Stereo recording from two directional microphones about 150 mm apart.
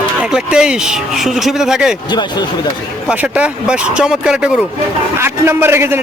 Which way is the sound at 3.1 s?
5° right (ahead or behind).